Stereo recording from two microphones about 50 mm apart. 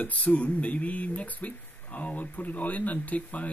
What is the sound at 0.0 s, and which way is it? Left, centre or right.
Speech, left.